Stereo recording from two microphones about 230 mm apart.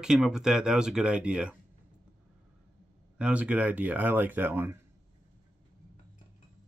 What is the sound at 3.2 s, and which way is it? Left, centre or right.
Speech, centre.